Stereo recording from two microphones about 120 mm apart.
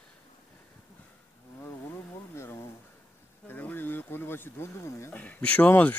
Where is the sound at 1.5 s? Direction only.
20° left (ahead or behind).